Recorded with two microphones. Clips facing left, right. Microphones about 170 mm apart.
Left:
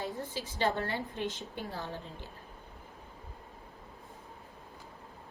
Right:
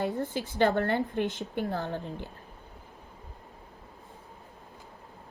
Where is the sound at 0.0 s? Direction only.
55° right (ahead or behind).